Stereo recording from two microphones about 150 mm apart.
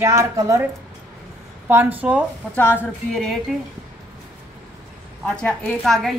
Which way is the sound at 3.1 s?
Centre (ahead or behind).